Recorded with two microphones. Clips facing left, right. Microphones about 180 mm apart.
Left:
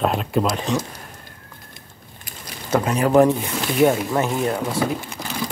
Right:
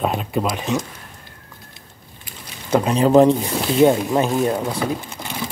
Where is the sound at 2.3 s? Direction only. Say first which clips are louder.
Even; 45° left (ahead or behind).